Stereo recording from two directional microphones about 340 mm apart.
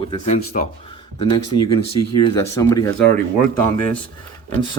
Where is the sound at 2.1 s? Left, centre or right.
Centre.